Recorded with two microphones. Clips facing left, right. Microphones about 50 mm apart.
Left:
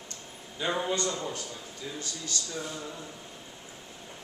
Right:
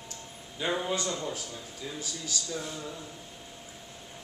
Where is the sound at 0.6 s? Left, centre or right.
Centre.